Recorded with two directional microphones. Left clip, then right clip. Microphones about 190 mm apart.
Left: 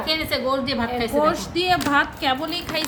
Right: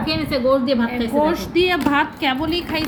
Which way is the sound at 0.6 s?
35° left (ahead or behind).